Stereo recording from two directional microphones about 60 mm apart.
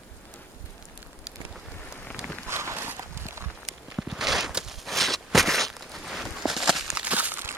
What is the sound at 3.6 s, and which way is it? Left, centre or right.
Walk, centre.